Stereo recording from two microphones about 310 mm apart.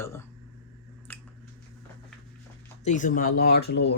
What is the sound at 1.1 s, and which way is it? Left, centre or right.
Squish, centre.